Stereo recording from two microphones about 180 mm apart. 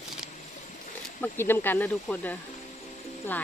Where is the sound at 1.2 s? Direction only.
10° left (ahead or behind).